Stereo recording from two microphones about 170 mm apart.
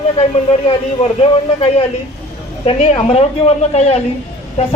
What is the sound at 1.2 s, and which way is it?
A woman's voice, 35° left (ahead or behind).